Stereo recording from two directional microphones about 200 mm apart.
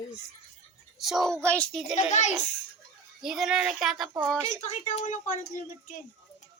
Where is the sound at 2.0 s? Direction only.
35° left (ahead or behind).